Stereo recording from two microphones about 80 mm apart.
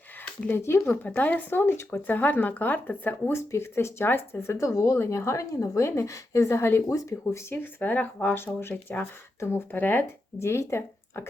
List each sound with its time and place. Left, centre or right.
0.4 s speech: left
1.0 s speech: centre; by 7.1 s left
7.5 s speech: left
9.4 s speech: left